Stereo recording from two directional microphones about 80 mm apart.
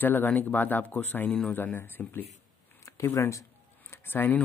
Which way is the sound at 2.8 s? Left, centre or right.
Left.